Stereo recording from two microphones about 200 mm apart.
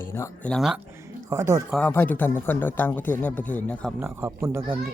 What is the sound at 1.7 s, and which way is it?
Speech, 10° left (ahead or behind).